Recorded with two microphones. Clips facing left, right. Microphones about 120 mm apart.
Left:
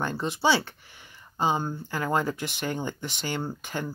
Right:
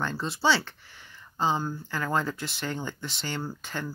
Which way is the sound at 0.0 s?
15° left (ahead or behind).